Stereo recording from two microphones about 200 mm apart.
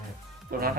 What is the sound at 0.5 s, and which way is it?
Speech, 50° right (ahead or behind).